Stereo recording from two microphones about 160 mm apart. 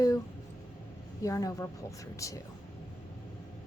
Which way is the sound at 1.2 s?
20° left (ahead or behind).